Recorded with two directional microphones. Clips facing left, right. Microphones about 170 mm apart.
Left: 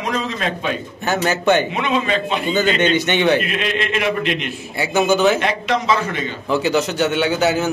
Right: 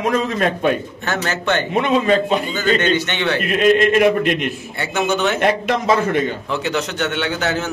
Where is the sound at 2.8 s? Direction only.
15° left (ahead or behind).